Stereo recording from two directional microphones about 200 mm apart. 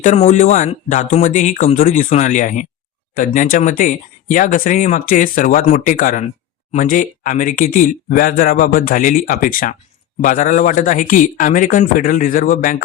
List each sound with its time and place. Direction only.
0.0 s speech: 35° left (ahead or behind)